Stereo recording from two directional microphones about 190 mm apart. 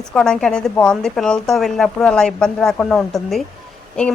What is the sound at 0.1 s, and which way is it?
Speech, 5° left (ahead or behind).